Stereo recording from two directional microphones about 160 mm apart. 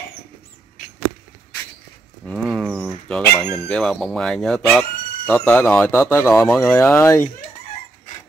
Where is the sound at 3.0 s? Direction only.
5° left (ahead or behind).